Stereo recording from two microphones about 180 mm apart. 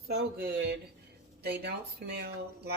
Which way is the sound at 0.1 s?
60° right (ahead or behind).